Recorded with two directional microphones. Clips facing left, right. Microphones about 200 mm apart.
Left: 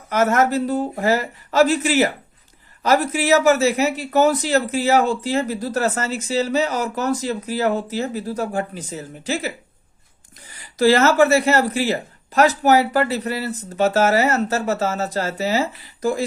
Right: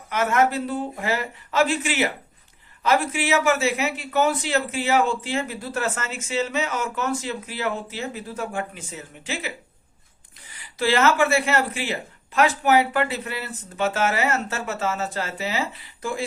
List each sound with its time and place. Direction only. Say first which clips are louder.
0.1 s a man's voice: left 4 dB; 40° left (ahead or behind)
10.6 s a man's voice: left 5 dB; 40° left (ahead or behind)